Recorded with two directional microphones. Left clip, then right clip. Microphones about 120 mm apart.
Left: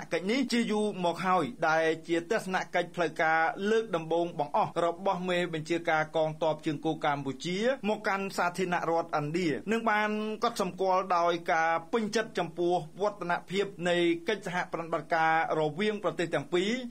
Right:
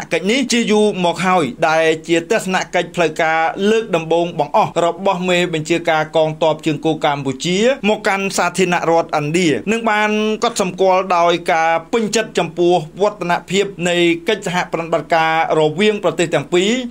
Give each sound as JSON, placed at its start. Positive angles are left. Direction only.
{"t": 0.1, "sound": "a man's voice", "side_deg": -25}